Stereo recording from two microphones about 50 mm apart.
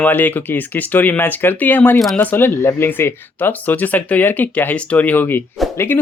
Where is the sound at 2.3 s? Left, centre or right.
Left.